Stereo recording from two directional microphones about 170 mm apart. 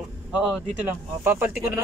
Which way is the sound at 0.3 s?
5° right (ahead or behind).